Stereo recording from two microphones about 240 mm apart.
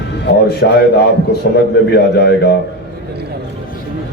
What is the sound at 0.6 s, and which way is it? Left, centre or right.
Speech, left.